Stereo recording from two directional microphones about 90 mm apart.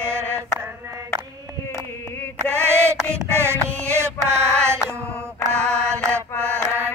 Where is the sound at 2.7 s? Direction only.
30° right (ahead or behind).